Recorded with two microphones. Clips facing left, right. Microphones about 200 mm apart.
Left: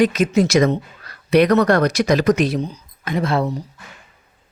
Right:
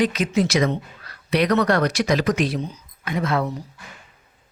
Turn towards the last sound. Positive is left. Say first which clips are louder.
# left 3 dB
turn(degrees=30)  # may be behind; listen again after turning